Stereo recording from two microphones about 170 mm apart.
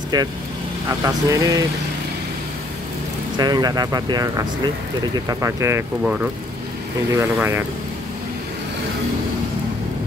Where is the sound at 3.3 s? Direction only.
25° right (ahead or behind); by 6.3 s 10° right (ahead or behind).